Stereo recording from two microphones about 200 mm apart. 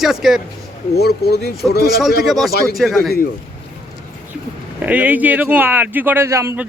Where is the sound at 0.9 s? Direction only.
55° left (ahead or behind).